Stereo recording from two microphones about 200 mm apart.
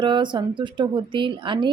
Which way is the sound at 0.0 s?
25° right (ahead or behind).